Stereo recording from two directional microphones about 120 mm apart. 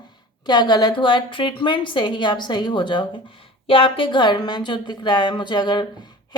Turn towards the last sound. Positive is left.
turn(degrees=40)  # may be behind; listen again after turning